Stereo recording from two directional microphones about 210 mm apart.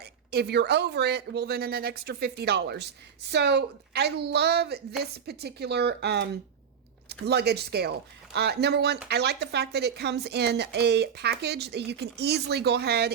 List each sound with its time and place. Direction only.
0.0 s speech: 50° right (ahead or behind)